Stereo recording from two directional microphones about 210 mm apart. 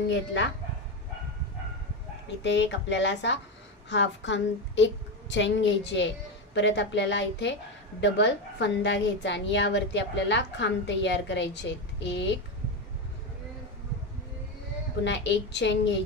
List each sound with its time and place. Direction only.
0.1 s a woman's voice: 60° left (ahead or behind)
2.4 s a woman's voice: 60° left (ahead or behind)
15.0 s a woman's voice: 55° left (ahead or behind)